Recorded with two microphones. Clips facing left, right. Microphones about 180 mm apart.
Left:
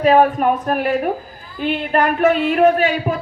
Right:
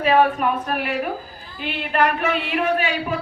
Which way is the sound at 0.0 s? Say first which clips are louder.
Left 4 dB; 45° left (ahead or behind).